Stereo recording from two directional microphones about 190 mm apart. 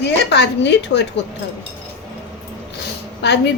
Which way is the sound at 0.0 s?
65° left (ahead or behind).